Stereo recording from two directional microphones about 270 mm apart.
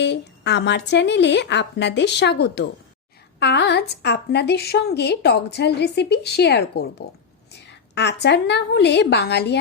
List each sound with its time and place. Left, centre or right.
0.0 s a woman's voice: left
7.9 s a woman's voice: left